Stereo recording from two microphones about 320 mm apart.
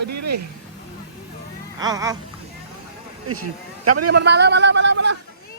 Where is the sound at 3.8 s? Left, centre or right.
Right.